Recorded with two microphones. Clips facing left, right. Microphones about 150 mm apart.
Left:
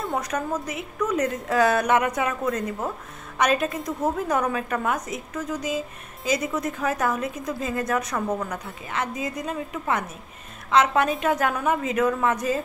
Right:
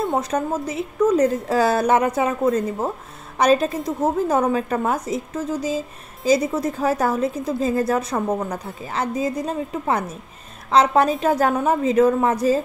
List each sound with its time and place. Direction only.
0.0 s a woman's voice: 25° right (ahead or behind)